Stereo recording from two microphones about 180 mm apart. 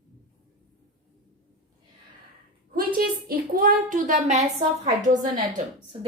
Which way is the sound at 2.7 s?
55° right (ahead or behind).